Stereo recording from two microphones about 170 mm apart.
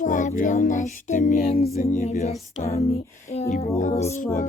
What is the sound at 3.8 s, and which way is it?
Female singing, 45° left (ahead or behind).